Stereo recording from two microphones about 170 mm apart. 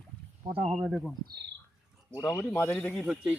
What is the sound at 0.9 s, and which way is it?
Music, centre (ahead or behind).